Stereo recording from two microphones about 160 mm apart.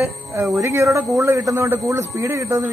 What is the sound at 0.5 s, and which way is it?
A man's voice, 20° right (ahead or behind).